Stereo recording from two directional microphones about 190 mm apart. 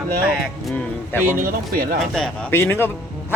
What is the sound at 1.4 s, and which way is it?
Speech, 50° right (ahead or behind).